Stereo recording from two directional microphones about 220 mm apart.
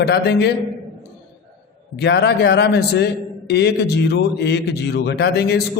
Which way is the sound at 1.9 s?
50° left (ahead or behind).